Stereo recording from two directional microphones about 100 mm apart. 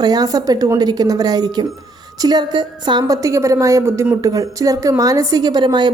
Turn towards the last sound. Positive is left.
turn(degrees=-45)  # may be behind; listen again after turning